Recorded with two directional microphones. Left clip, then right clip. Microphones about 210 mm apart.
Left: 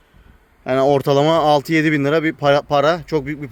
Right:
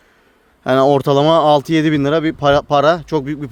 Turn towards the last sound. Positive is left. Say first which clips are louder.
# right 2 dB
turn(degrees=-15)  # may be behind; listen again after turning